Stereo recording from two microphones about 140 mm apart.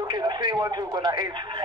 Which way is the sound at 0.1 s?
30° right (ahead or behind).